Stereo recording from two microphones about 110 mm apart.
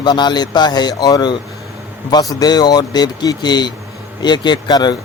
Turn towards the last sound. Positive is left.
turn(degrees=40)  # may be behind; listen again after turning